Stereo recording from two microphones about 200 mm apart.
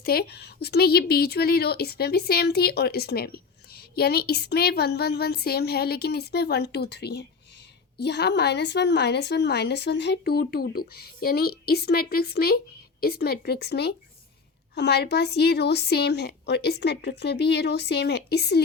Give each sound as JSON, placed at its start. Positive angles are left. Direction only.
{"t": 0.0, "sound": "a woman's voice", "side_deg": 50}